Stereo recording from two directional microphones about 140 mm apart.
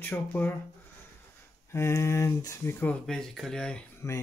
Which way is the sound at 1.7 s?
20° left (ahead or behind).